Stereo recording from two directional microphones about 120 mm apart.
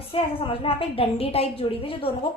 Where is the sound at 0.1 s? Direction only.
50° left (ahead or behind).